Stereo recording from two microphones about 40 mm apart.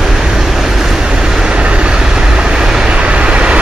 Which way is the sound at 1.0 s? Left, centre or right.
Centre.